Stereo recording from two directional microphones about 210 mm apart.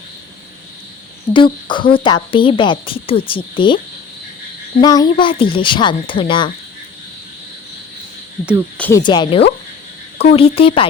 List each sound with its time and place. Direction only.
1.3 s a woman's voice: 20° left (ahead or behind)
4.8 s a woman's voice: 20° left (ahead or behind)
8.8 s a woman's voice: 15° left (ahead or behind)